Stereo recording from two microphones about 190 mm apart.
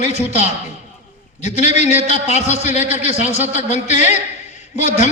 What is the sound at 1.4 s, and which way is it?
A man's voice, 35° left (ahead or behind).